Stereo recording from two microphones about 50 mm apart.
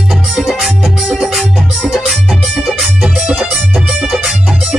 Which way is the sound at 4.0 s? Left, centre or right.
Centre.